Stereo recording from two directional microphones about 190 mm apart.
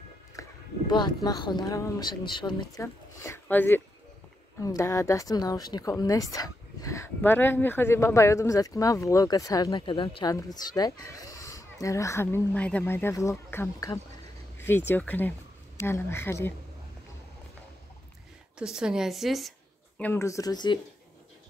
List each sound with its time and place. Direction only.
0.4 s speech: 20° left (ahead or behind)
18.6 s a woman's voice: 5° right (ahead or behind)
20.0 s speech: 10° left (ahead or behind)